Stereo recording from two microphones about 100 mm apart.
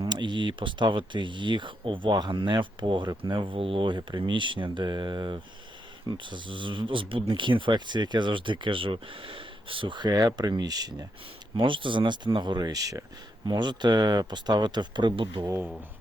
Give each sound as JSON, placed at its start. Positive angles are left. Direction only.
{"t": 0.0, "sound": "speech", "side_deg": -50}
{"t": 11.5, "sound": "speech", "side_deg": -55}